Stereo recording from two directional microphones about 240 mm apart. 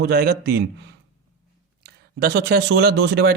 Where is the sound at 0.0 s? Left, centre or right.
Right.